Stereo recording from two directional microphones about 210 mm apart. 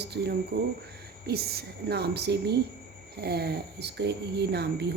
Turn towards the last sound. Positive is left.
turn(degrees=-50)  # may be behind; listen again after turning